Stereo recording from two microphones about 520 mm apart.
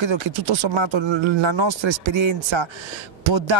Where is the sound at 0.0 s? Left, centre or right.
Right.